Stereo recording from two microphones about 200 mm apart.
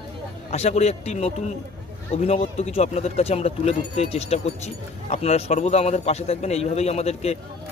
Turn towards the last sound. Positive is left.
turn(degrees=30)  # may be behind; listen again after turning